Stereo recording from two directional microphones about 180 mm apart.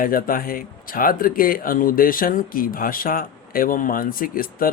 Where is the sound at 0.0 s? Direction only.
50° left (ahead or behind).